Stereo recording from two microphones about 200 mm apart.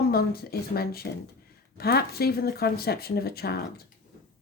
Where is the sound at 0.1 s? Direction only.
50° left (ahead or behind).